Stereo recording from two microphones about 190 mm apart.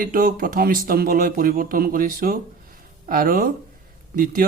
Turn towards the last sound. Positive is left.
turn(degrees=-45)  # may be behind; listen again after turning